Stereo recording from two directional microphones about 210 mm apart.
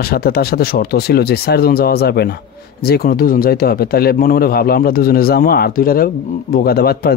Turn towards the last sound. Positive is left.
turn(degrees=50)  # may be behind; listen again after turning